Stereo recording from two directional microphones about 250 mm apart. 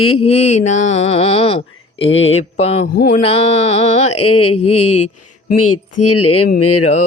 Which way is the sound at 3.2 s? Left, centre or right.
Left.